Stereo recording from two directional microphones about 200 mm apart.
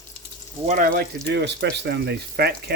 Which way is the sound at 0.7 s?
45° right (ahead or behind).